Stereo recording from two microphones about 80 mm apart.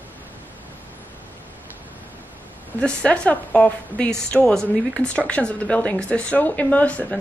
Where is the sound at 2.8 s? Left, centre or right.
Centre.